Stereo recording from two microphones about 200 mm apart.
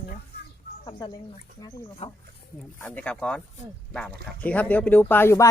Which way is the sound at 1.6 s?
20° left (ahead or behind).